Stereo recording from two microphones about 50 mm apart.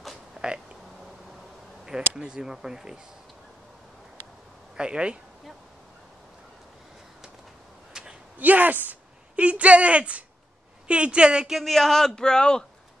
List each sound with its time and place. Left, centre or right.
0.0 s a sound: centre
1.9 s speech: centre
4.7 s a woman's voice: centre
7.9 s a sound: centre
8.4 s speech: right
9.3 s a woman's voice: right
11.4 s speech: centre
11.7 s speech: centre